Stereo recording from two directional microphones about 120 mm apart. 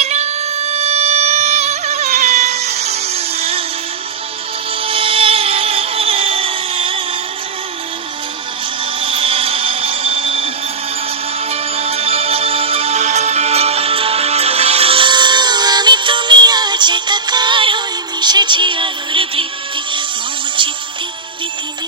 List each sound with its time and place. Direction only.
0.0 s music: 65° right (ahead or behind)
4.8 s music: 50° right (ahead or behind)
9.0 s music: 45° right (ahead or behind)
11.5 s music: 55° right (ahead or behind)